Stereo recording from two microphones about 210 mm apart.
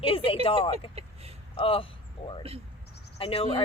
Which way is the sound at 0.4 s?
25° left (ahead or behind).